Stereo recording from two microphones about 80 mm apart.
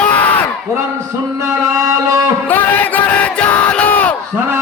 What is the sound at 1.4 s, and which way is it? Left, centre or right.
Music, right.